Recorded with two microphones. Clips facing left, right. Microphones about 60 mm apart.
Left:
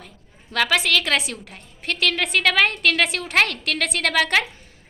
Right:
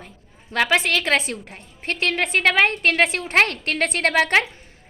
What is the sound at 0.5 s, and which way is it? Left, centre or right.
A woman's voice, right.